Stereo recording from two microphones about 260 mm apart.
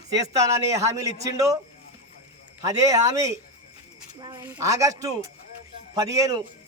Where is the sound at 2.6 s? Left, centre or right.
Centre.